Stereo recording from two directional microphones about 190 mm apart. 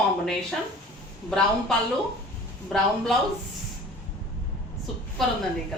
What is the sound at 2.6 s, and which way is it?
Speech, 5° left (ahead or behind).